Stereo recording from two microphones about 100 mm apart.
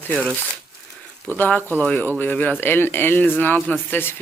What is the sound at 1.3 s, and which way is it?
Speech, 15° left (ahead or behind).